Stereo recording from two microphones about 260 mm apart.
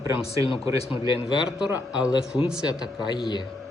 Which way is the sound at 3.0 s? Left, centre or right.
Centre.